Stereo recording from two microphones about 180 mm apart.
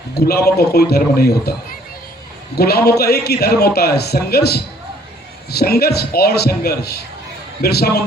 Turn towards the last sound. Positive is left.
turn(degrees=60)  # may be behind; listen again after turning